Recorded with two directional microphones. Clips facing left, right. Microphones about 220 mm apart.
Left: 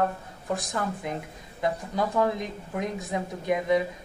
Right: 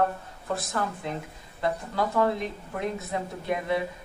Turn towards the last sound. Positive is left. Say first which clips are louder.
# left 3 dB
turn(degrees=15)  # may be behind; listen again after turning